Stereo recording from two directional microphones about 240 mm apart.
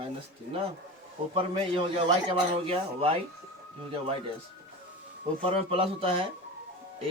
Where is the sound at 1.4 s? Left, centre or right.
Right.